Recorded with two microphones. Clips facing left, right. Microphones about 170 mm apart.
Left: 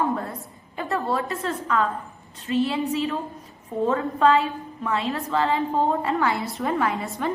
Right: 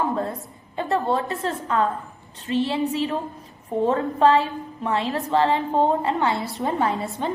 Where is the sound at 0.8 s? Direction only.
25° right (ahead or behind).